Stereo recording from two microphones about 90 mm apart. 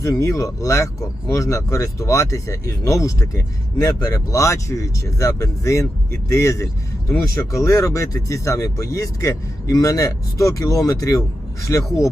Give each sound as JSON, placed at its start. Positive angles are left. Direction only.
{"t": 0.0, "sound": "speech", "side_deg": 35}